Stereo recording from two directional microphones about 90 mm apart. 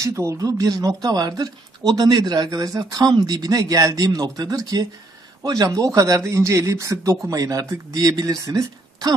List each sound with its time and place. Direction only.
0.0 s speech: 35° right (ahead or behind)